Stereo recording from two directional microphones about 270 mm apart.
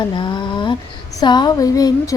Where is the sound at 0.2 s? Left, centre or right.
Centre.